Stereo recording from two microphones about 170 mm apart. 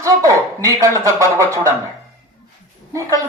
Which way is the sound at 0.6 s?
20° right (ahead or behind).